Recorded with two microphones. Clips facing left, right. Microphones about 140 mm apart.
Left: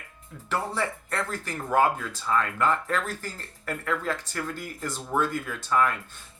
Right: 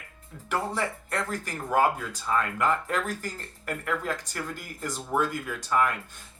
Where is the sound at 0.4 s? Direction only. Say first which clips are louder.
Even; 15° right (ahead or behind).